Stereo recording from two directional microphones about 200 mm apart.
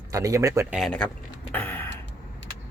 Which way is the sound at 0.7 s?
5° left (ahead or behind).